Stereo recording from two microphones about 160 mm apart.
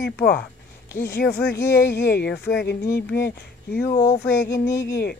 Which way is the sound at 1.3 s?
85° left.